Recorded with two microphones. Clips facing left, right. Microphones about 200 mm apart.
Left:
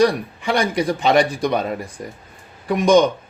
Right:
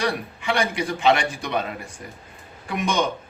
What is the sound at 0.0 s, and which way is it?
A man's voice, 35° left (ahead or behind).